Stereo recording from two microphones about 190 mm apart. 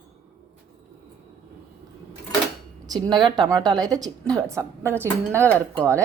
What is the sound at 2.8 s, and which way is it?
A woman's voice, 20° right (ahead or behind).